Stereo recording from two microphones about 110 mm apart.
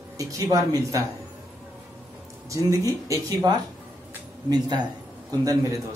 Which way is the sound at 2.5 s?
30° right (ahead or behind).